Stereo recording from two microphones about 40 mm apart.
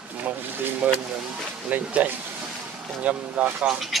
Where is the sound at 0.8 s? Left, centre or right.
Right.